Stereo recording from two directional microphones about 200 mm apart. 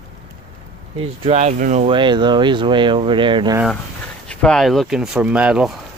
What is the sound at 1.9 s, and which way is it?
Speech, 25° right (ahead or behind).